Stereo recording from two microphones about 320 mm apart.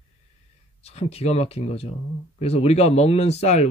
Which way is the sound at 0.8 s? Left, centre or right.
Centre.